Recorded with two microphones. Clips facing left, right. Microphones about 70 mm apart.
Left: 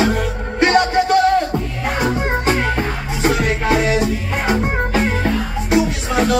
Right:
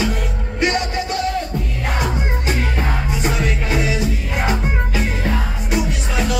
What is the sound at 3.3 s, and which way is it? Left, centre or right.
Music, left.